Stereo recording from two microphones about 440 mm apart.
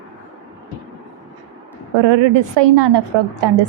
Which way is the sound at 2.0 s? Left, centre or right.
Right.